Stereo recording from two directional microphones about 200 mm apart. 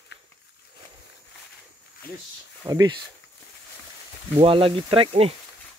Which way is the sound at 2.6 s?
20° right (ahead or behind).